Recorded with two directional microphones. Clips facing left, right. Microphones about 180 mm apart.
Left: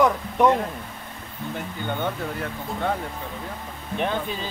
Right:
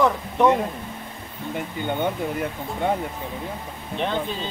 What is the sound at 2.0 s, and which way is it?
Speech, 15° right (ahead or behind).